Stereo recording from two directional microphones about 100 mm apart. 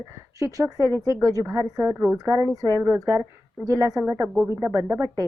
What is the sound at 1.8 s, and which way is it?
Speech, 15° right (ahead or behind).